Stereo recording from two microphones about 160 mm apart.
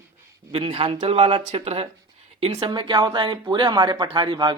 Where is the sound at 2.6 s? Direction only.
30° right (ahead or behind).